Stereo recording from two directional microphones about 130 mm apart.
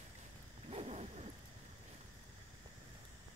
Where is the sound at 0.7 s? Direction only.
55° right (ahead or behind).